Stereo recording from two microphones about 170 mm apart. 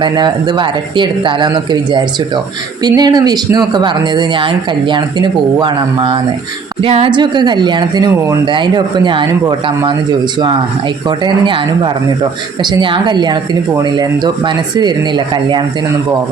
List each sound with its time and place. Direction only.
0.0 s speech: 25° right (ahead or behind)
11.4 s speech: 25° right (ahead or behind)